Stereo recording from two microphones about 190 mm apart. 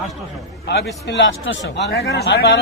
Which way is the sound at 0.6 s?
65° left (ahead or behind).